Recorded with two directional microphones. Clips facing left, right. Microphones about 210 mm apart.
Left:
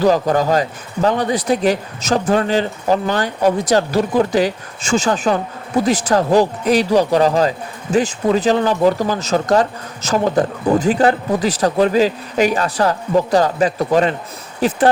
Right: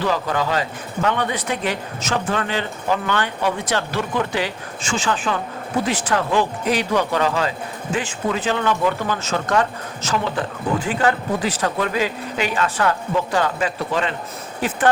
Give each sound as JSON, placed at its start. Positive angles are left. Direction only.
{"t": 0.0, "sound": "speech", "side_deg": 40}